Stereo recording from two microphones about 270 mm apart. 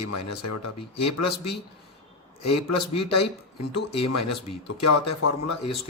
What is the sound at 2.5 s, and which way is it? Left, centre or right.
Speech, left.